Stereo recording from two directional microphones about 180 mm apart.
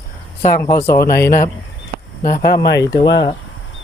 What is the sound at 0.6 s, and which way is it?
Speech, 15° left (ahead or behind).